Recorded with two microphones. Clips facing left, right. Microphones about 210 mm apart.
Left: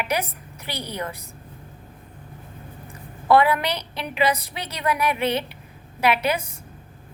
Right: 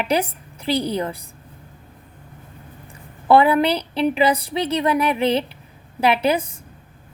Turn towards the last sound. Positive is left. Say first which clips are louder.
# right 4 dB
turn(degrees=-30)  # may be behind; listen again after turning